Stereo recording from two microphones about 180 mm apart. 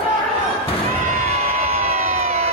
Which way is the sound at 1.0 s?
50° right (ahead or behind).